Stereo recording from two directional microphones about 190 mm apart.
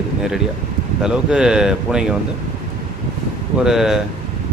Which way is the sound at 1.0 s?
5° right (ahead or behind).